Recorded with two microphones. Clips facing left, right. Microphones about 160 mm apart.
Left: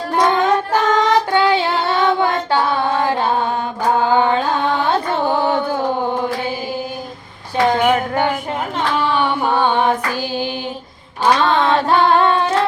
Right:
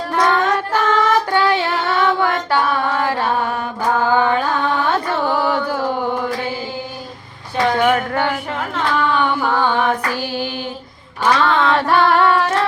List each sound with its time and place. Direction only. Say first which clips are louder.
0.2 s child singing: left 2 dB; 20° left (ahead or behind)
2.0 s music: even; 20° left (ahead or behind)
4.0 s carnatic music: even; 20° left (ahead or behind)
7.5 s a sound: left 1 dB; 20° left (ahead or behind)
9.0 s female singing: even; 30° left (ahead or behind)
11.2 s singing: left 1 dB; 30° left (ahead or behind)